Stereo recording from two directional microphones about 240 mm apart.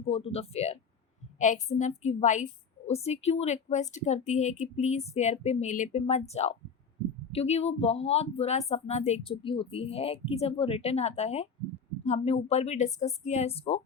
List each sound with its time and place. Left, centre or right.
0.0 s speech: left